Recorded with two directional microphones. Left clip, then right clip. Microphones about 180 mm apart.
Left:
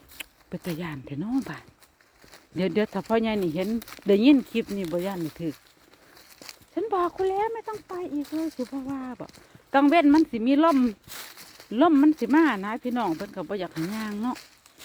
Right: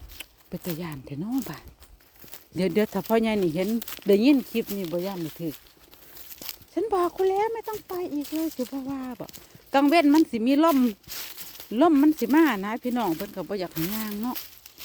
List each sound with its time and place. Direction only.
0.2 s a sound: centre (ahead or behind)
0.8 s speech: centre (ahead or behind)
2.6 s speech: 15° right (ahead or behind)
3.9 s speech: 5° right (ahead or behind)
6.7 s speech: 15° right (ahead or behind)
11.1 s a sound: 15° left (ahead or behind)
11.7 s speech: 10° right (ahead or behind)
13.3 s speech: 10° right (ahead or behind)
13.9 s speech: 5° left (ahead or behind)